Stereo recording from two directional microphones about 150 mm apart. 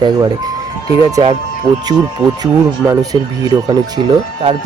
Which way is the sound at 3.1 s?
25° right (ahead or behind).